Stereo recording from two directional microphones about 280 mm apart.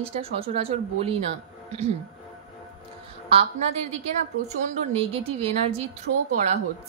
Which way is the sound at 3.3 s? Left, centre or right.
Centre.